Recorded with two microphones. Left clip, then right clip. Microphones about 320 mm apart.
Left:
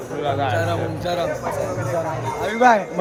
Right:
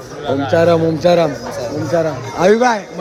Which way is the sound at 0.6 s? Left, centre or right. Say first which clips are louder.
Right 12 dB; centre.